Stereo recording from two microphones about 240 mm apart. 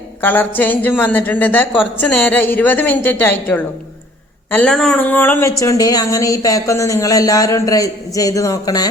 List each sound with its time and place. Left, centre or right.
0.2 s speech: centre